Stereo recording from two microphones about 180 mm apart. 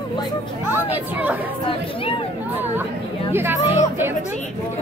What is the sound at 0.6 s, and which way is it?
Speech, 10° right (ahead or behind).